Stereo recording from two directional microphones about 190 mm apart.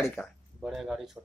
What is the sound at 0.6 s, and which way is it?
Speech, centre (ahead or behind).